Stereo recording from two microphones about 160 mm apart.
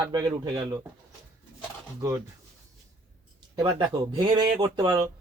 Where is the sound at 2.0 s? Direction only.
20° right (ahead or behind).